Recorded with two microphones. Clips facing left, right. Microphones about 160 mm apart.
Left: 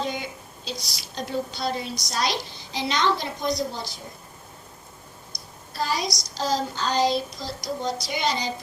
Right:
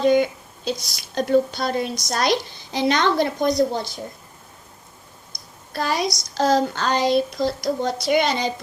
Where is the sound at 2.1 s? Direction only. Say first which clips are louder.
Right 5 dB; 55° right (ahead or behind).